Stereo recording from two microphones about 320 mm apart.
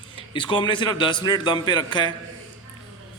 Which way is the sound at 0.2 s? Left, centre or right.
Centre.